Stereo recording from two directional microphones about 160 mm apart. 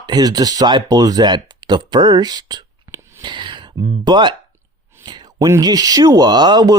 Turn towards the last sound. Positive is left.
turn(degrees=-25)  # may be behind; listen again after turning